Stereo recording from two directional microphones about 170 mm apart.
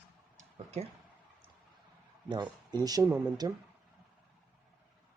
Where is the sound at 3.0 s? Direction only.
10° right (ahead or behind).